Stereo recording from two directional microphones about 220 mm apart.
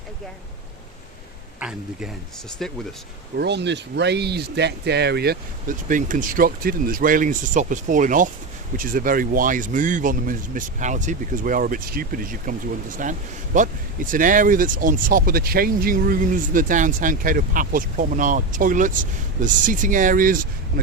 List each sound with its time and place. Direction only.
1.5 s speech: 5° right (ahead or behind)
3.3 s speech: 50° right (ahead or behind)